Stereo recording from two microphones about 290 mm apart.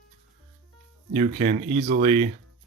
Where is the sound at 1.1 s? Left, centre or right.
Right.